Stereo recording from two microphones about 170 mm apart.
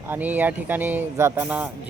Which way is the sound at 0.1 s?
10° right (ahead or behind).